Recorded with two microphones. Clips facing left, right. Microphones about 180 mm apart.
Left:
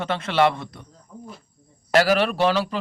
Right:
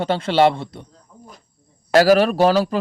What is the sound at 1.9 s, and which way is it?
Speech, 40° right (ahead or behind).